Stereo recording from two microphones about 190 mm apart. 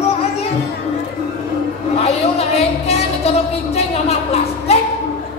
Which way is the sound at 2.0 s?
35° left (ahead or behind).